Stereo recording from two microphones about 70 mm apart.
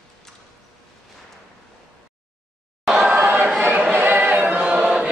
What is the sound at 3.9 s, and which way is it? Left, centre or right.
Choir, right.